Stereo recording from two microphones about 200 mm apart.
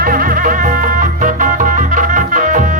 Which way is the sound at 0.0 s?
45° right (ahead or behind).